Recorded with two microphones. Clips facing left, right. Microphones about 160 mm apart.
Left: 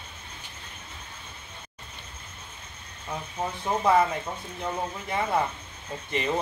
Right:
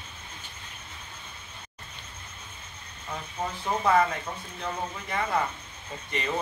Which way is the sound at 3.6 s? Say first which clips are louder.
Left 1 dB; 15° left (ahead or behind).